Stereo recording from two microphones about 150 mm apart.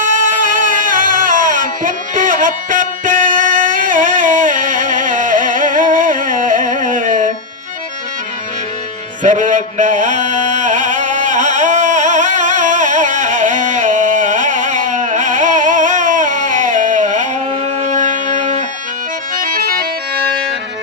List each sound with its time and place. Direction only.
0.0 s music: 60° right (ahead or behind)
9.2 s mantra: 55° right (ahead or behind)
17.7 s music: 55° right (ahead or behind)
19.4 s music: 75° right (ahead or behind)